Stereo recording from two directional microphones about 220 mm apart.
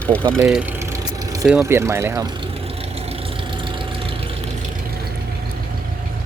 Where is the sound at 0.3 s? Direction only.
5° right (ahead or behind); by 4.4 s 25° right (ahead or behind).